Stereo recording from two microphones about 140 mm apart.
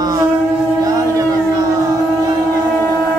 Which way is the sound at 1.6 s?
25° right (ahead or behind).